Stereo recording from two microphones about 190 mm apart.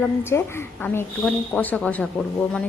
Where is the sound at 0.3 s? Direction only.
15° left (ahead or behind).